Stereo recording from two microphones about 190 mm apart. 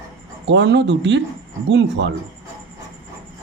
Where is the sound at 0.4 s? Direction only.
65° right (ahead or behind).